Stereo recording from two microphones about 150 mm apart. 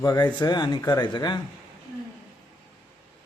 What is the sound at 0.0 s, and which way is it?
Speech, 25° left (ahead or behind).